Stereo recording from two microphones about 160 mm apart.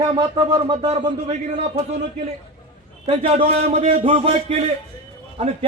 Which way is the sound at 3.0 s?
40° right (ahead or behind).